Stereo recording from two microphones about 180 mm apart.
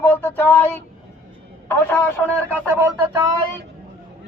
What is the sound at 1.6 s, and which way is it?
Speech, 10° left (ahead or behind).